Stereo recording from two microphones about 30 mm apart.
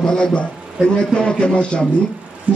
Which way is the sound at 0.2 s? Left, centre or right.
Left.